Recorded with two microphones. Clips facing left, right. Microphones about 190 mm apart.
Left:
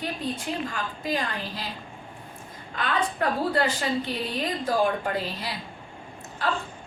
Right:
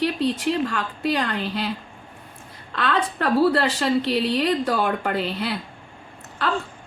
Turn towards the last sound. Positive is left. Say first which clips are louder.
# right 3 dB
turn(degrees=-65)  # may be behind; listen again after turning